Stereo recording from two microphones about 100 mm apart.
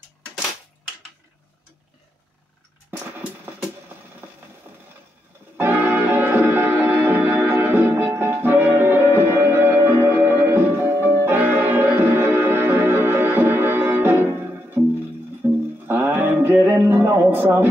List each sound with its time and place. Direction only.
3.0 s music: 20° right (ahead or behind)
5.6 s music: 20° right (ahead or behind)